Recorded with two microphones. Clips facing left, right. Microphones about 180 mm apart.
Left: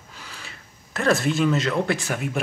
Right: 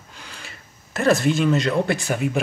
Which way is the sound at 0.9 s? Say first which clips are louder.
Right 3 dB; centre (ahead or behind).